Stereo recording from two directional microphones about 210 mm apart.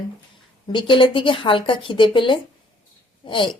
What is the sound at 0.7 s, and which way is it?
Speech, 25° left (ahead or behind).